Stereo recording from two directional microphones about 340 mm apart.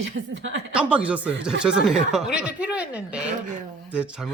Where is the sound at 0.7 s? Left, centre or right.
Centre.